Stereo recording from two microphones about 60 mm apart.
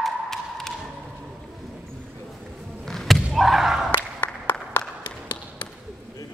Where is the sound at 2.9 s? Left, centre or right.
Centre.